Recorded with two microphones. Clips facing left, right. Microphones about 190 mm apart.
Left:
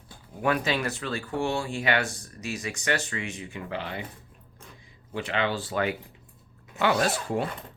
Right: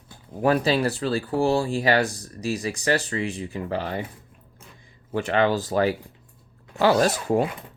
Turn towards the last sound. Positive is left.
turn(degrees=-40)  # may be behind; listen again after turning